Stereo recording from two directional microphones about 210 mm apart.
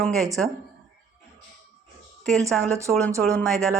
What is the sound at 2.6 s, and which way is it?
Speech, 15° right (ahead or behind).